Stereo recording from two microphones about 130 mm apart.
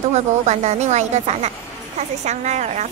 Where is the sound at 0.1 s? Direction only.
60° right (ahead or behind).